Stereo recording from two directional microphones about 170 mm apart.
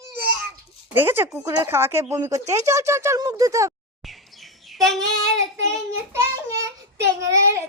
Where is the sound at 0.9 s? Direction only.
15° right (ahead or behind).